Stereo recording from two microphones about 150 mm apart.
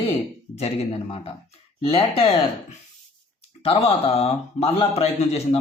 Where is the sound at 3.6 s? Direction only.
40° left (ahead or behind).